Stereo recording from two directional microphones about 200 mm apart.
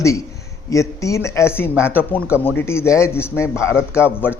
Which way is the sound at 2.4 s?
10° left (ahead or behind).